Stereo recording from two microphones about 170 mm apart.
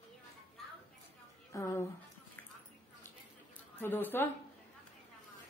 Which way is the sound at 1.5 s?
15° left (ahead or behind).